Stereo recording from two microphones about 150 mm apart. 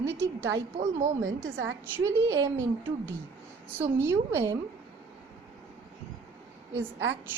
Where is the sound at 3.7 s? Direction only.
15° right (ahead or behind).